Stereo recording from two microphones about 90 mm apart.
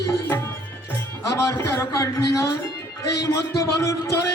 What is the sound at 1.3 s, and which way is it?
Music, 35° left (ahead or behind).